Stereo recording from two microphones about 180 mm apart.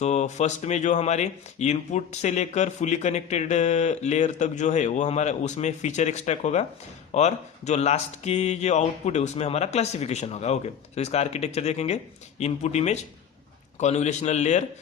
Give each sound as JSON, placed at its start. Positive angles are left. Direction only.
{"t": 0.0, "sound": "speech", "side_deg": 40}